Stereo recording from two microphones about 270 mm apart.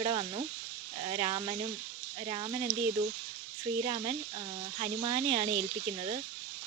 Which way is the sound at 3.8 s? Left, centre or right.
Right.